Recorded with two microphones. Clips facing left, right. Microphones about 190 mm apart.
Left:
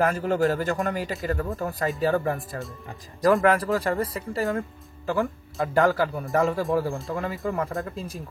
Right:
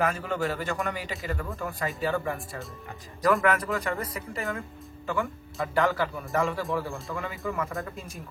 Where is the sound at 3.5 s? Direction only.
35° left (ahead or behind).